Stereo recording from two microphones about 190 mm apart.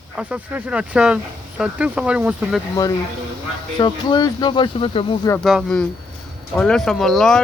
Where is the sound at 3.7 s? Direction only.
25° left (ahead or behind).